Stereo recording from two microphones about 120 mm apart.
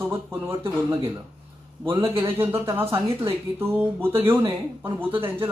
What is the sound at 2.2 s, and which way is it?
Speech, 20° right (ahead or behind).